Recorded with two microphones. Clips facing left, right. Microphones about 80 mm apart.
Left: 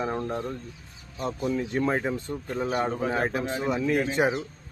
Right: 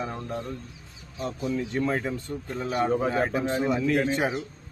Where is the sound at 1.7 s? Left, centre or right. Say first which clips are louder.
Left 1 dB; left.